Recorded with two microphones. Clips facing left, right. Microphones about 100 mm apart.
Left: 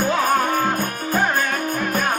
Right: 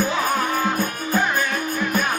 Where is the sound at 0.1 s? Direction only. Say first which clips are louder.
Left 3 dB; 50° left (ahead or behind).